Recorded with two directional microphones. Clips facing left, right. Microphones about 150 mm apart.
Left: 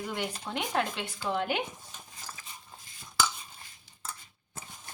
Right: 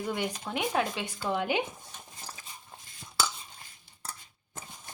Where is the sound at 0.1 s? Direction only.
10° right (ahead or behind).